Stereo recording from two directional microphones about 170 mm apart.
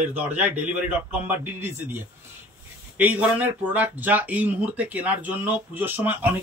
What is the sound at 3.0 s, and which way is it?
Speech, 10° right (ahead or behind).